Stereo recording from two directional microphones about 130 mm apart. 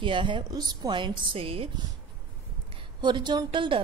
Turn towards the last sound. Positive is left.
turn(degrees=-40)  # may be behind; listen again after turning